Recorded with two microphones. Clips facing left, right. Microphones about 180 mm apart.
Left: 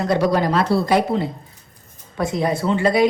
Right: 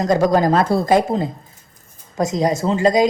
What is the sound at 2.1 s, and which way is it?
Speech, 35° right (ahead or behind).